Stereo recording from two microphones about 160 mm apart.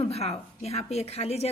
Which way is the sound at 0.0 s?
40° left (ahead or behind).